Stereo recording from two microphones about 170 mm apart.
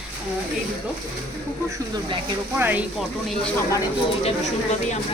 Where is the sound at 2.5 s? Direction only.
10° right (ahead or behind).